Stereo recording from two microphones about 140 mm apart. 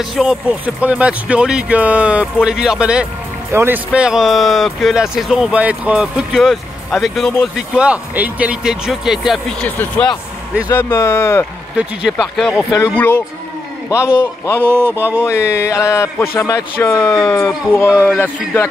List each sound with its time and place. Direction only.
0.0 s speech: 5° right (ahead or behind)
9.6 s speech: 5° left (ahead or behind)
10.7 s speech: 20° left (ahead or behind)
11.7 s speech: centre (ahead or behind)
12.7 s speech: 15° left (ahead or behind)
14.2 s speech: 15° left (ahead or behind)
15.2 s speech: 20° left (ahead or behind)